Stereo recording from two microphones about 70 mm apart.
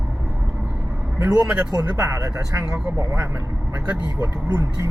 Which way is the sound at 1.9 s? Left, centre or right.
Right.